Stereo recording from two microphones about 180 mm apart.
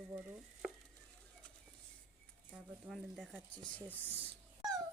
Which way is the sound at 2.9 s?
Centre (ahead or behind).